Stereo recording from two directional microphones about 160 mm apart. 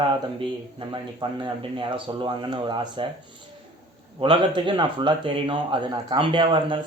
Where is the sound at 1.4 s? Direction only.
30° right (ahead or behind).